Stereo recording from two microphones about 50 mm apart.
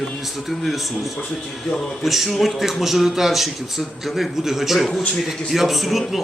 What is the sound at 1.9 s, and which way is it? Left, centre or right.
Speech, centre.